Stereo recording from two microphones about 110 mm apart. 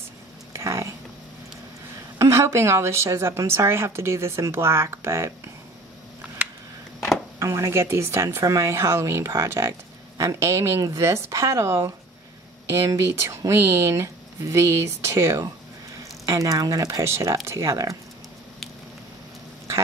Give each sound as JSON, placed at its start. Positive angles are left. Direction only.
{"t": 0.5, "sound": "a sound", "side_deg": -25}
{"t": 2.1, "sound": "a woman's voice", "side_deg": -25}
{"t": 7.3, "sound": "a woman's voice", "side_deg": -25}